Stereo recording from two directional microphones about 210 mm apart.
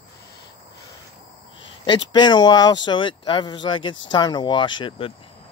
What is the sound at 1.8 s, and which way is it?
Speech, 20° left (ahead or behind).